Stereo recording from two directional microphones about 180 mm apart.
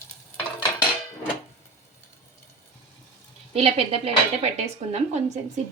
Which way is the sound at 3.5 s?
35° right (ahead or behind).